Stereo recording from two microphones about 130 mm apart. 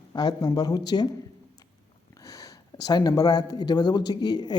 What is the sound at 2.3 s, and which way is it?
Speech, 30° left (ahead or behind).